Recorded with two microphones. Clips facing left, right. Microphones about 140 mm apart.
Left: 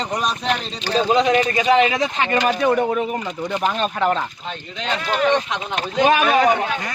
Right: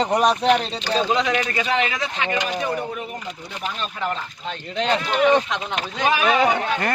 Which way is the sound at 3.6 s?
70° left (ahead or behind).